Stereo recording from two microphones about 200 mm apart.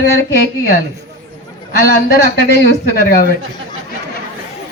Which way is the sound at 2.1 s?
50° left (ahead or behind).